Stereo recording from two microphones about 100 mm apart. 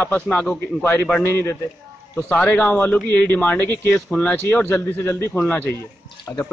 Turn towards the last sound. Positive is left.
turn(degrees=15)  # may be behind; listen again after turning